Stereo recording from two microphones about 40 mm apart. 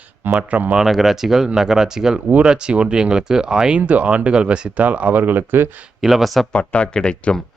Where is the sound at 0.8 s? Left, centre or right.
Centre.